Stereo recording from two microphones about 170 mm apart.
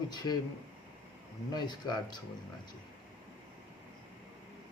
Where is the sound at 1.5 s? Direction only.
25° left (ahead or behind).